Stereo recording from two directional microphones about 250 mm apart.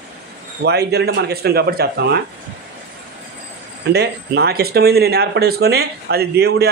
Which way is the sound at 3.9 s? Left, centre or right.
Right.